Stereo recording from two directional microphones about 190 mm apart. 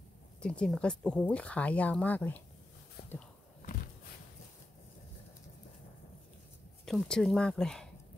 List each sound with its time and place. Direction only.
0.4 s speech: 5° left (ahead or behind)
3.0 s a sound: 55° left (ahead or behind)
6.9 s speech: 5° left (ahead or behind)